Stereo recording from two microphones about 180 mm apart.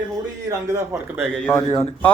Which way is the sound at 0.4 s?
15° right (ahead or behind).